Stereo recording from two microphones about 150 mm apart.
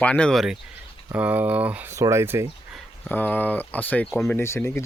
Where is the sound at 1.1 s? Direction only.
10° right (ahead or behind).